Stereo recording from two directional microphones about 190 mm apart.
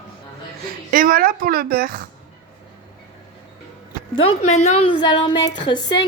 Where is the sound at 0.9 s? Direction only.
50° right (ahead or behind).